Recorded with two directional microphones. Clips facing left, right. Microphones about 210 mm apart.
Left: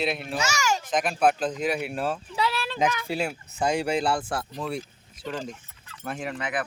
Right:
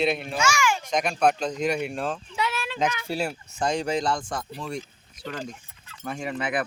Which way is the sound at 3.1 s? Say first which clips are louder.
Even; centre (ahead or behind).